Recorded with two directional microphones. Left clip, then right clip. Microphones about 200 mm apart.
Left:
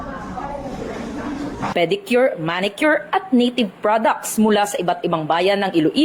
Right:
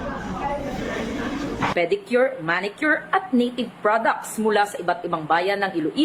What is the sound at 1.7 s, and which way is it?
A woman's voice, 40° left (ahead or behind).